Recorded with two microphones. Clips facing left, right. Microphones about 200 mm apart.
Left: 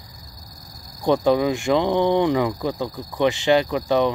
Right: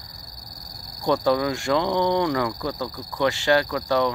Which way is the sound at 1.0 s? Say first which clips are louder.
Left 3 dB; 20° left (ahead or behind).